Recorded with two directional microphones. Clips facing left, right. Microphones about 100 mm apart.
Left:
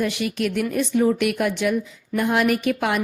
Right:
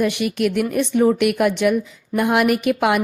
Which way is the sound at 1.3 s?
65° right (ahead or behind).